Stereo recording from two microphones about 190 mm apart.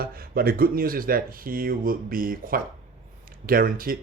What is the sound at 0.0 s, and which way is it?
Speech, 50° right (ahead or behind).